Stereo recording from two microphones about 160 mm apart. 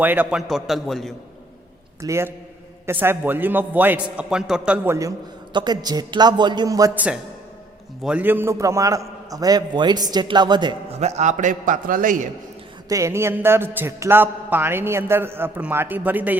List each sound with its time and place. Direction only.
0.0 s a man's voice: 10° right (ahead or behind)
2.0 s a man's voice: 15° right (ahead or behind)
5.5 s a man's voice: 25° right (ahead or behind)
6.9 s a man's voice: 10° right (ahead or behind); by 10.8 s 25° right (ahead or behind)
11.0 s a man's voice: 45° right (ahead or behind)
12.9 s a man's voice: 20° right (ahead or behind)